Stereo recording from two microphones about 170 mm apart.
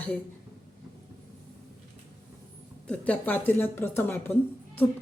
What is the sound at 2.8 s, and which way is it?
A woman's voice, 5° left (ahead or behind).